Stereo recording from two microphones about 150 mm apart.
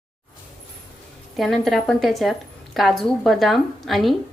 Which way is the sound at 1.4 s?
Centre (ahead or behind).